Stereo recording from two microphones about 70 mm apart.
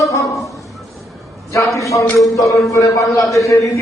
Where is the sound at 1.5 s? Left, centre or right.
Left.